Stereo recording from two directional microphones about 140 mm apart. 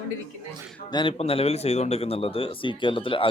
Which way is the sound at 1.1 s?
45° left (ahead or behind).